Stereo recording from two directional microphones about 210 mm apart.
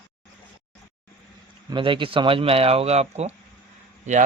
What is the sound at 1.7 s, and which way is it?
Speech, 25° right (ahead or behind).